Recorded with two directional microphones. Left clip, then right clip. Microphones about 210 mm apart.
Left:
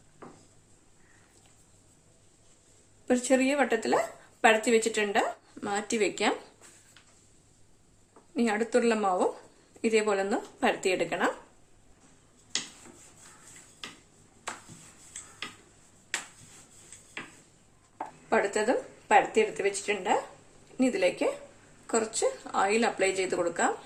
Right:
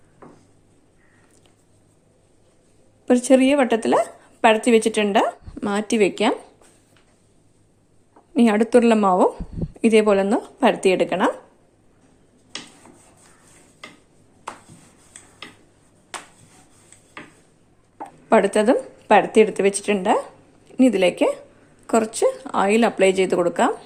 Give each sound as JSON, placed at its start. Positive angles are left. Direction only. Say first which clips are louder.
{"t": 3.1, "sound": "speech", "louder": "right 10 dB", "side_deg": -30}
{"t": 8.3, "sound": "speech", "louder": "right 10 dB", "side_deg": -35}
{"t": 18.3, "sound": "speech", "louder": "right 10 dB", "side_deg": -40}